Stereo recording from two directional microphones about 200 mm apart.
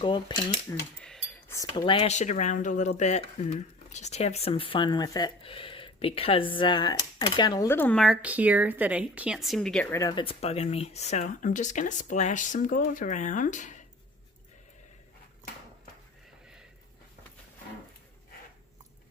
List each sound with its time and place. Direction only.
0.0 s speech: 25° left (ahead or behind)
1.0 s a sound: 5° left (ahead or behind)
1.7 s speech: 25° left (ahead or behind); by 9.9 s centre (ahead or behind)
9.9 s speech: 15° left (ahead or behind); by 13.8 s 40° left (ahead or behind)